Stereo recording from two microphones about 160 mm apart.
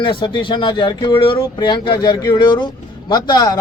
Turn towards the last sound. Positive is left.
turn(degrees=25)  # may be behind; listen again after turning